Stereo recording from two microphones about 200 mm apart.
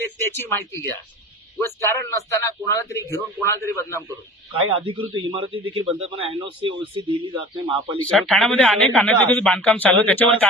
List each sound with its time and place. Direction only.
1.5 s a man's voice: 15° left (ahead or behind)
4.5 s a man's voice: 25° right (ahead or behind)
8.1 s speech: centre (ahead or behind)